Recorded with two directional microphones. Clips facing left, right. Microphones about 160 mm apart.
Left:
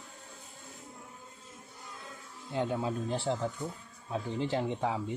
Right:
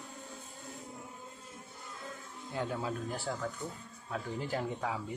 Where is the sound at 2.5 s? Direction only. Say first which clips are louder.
Left 4 dB; 20° left (ahead or behind).